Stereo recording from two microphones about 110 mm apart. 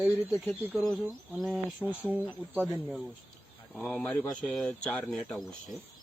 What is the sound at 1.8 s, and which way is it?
Speech, 15° left (ahead or behind).